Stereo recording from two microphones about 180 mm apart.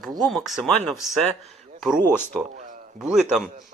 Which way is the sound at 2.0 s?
10° left (ahead or behind).